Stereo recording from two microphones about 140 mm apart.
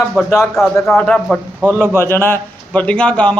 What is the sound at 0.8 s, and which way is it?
Speech, 5° left (ahead or behind).